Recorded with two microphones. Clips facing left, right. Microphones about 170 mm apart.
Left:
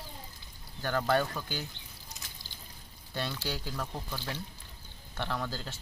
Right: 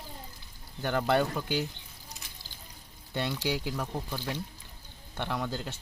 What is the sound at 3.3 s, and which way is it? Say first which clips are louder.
Speech: right 5 dB; 15° right (ahead or behind).